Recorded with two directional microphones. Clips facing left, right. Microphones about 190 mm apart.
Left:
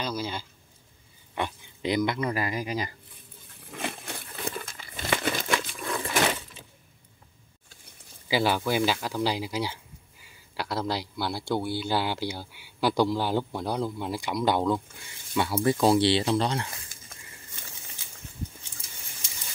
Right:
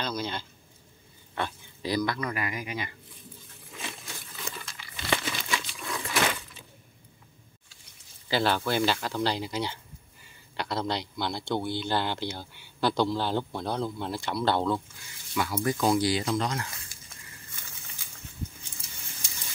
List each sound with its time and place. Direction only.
0.0 s a sound: 10° left (ahead or behind)
1.3 s speech: 20° left (ahead or behind); by 2.9 s 35° left (ahead or behind)
3.7 s crumpling: 60° left (ahead or behind)
8.3 s a man's voice: 10° left (ahead or behind)
15.3 s speech: 25° left (ahead or behind)